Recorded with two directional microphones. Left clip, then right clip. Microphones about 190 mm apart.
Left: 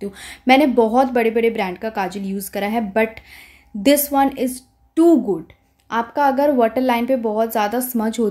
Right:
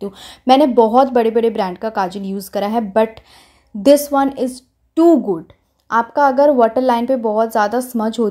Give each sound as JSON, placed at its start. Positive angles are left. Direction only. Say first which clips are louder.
{"t": 0.0, "sound": "a woman's voice", "louder": "right 2 dB", "side_deg": -20}